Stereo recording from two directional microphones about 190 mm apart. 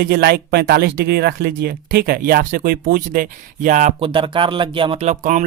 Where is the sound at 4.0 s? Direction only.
25° right (ahead or behind).